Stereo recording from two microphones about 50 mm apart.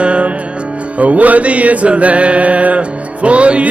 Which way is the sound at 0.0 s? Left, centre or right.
Right.